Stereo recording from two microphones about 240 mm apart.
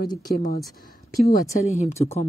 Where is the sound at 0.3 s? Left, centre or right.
Left.